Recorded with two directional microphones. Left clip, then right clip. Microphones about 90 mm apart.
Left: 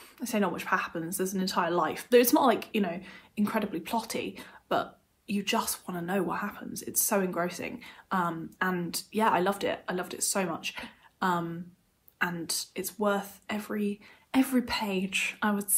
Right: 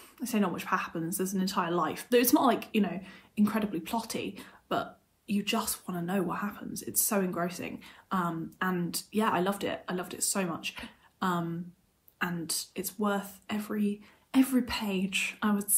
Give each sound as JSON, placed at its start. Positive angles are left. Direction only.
{"t": 0.2, "sound": "a woman's voice", "side_deg": 25}